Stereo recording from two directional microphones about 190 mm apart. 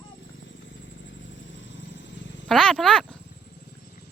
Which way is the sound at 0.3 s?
80° left.